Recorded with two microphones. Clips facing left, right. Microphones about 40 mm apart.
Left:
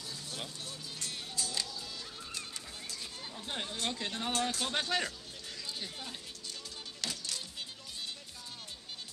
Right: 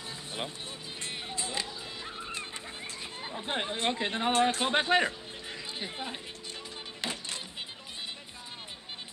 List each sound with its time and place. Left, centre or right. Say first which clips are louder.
1.0 s music: right 3 dB; right
2.9 s speech: right 5 dB; right
7.0 s music: right 4 dB; right